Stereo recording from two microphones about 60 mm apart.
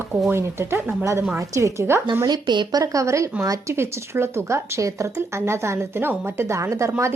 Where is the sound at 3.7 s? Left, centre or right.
Right.